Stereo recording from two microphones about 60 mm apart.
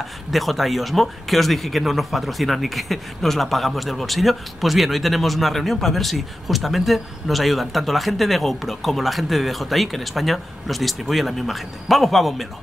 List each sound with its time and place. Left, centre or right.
0.0 s speech: centre